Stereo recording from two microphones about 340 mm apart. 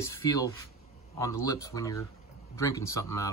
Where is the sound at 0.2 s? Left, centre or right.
Centre.